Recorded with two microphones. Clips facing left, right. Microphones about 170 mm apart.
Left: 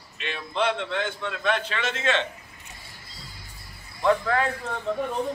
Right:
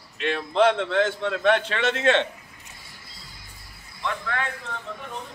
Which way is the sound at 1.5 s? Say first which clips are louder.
Right 5 dB; 65° right (ahead or behind).